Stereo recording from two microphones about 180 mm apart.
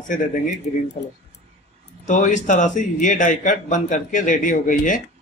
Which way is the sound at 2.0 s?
45° left (ahead or behind).